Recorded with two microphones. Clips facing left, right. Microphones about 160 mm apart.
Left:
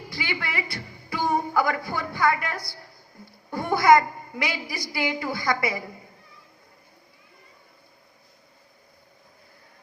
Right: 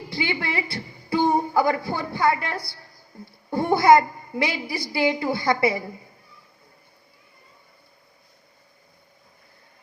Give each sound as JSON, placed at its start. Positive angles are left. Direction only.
{"t": 0.1, "sound": "a woman's voice", "side_deg": -25}
{"t": 3.1, "sound": "a sound", "side_deg": -25}
{"t": 3.5, "sound": "a woman's voice", "side_deg": -30}